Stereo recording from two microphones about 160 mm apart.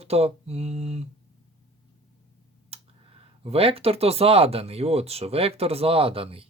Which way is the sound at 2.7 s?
40° right (ahead or behind).